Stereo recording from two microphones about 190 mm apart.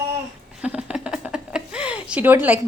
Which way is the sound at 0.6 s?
5° right (ahead or behind).